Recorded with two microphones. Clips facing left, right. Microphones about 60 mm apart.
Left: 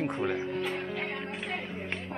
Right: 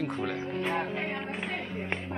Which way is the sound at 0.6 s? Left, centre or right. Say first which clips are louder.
Right 3 dB; right.